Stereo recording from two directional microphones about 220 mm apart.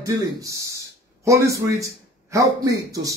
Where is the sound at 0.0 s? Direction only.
15° right (ahead or behind).